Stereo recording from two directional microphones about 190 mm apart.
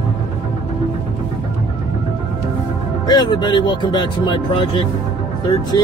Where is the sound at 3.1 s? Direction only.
20° left (ahead or behind).